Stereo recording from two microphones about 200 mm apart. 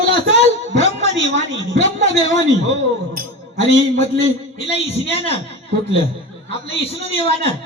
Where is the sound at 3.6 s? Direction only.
30° left (ahead or behind).